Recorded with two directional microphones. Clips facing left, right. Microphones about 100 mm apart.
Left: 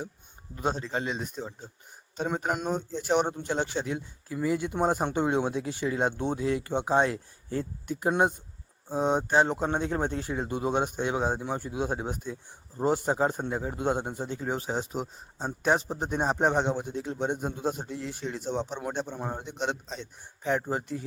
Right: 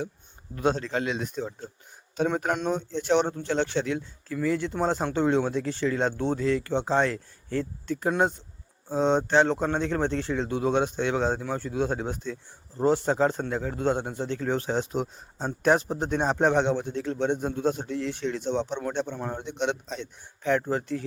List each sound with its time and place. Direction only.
0.6 s a man's voice: centre (ahead or behind)